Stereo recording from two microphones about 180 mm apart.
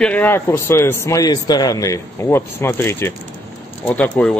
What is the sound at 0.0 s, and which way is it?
A man's voice, 10° left (ahead or behind).